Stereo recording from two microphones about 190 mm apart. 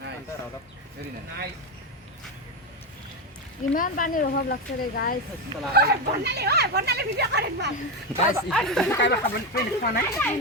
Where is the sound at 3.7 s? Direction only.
45° left (ahead or behind).